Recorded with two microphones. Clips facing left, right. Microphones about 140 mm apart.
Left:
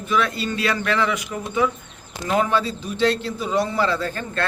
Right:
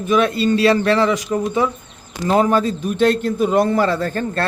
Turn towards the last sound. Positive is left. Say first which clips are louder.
# right 5 dB
turn(degrees=-40)  # may be behind; listen again after turning